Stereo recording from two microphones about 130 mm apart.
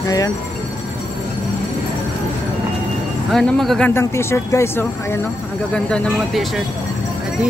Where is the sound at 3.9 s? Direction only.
20° left (ahead or behind).